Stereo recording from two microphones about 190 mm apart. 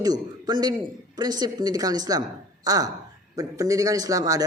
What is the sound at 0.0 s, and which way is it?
A man's voice, 20° right (ahead or behind).